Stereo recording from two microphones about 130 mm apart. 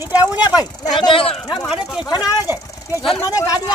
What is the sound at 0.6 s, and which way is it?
Speech, 35° left (ahead or behind).